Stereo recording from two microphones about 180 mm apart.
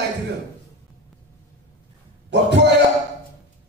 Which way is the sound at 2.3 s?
70° right (ahead or behind).